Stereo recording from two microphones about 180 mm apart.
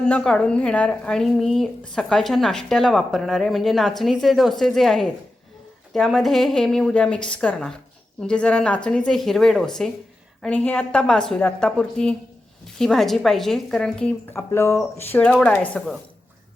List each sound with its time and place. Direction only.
0.1 s speech: 5° left (ahead or behind)